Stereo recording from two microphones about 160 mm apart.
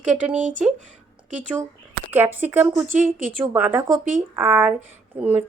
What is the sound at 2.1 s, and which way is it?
Speech, 10° right (ahead or behind).